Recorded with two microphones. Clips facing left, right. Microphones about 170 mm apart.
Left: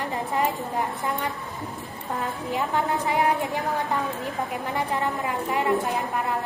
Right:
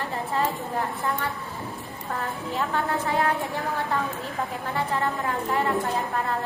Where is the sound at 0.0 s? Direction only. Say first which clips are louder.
Left 1 dB; 15° left (ahead or behind).